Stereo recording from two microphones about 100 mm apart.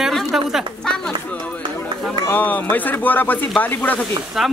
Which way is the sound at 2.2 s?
20° left (ahead or behind).